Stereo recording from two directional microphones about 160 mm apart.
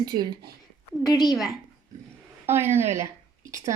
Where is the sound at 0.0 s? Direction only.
25° right (ahead or behind).